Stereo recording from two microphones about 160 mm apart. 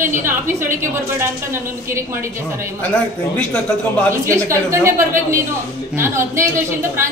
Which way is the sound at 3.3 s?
10° left (ahead or behind).